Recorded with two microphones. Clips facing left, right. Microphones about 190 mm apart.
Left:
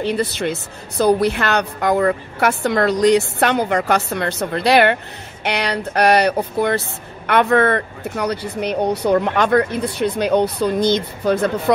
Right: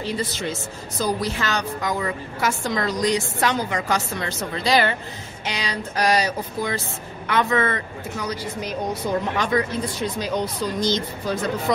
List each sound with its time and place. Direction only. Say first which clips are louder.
0.0 s a woman's voice: left 6 dB; 65° left (ahead or behind)